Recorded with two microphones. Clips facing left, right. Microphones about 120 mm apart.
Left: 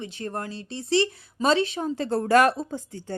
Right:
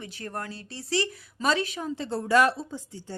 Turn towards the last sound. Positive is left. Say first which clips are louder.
# left 5 dB
turn(degrees=55)  # may be behind; listen again after turning